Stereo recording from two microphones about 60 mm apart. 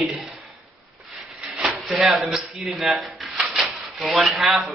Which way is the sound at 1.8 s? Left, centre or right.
Centre.